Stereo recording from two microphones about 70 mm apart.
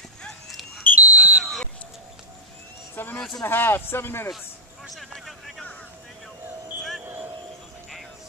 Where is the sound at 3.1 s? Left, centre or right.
Centre.